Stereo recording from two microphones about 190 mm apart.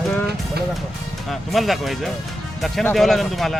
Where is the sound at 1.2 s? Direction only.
Centre (ahead or behind).